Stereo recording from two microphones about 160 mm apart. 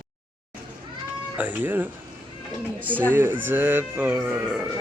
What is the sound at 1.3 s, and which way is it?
Speech, 10° right (ahead or behind).